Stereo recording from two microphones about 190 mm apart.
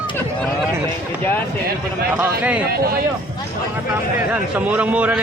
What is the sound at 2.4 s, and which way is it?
Speech, 5° right (ahead or behind).